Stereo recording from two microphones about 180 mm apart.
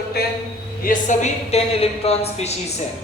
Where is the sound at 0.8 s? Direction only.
45° left (ahead or behind).